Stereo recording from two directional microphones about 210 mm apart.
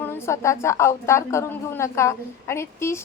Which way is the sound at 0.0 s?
10° left (ahead or behind).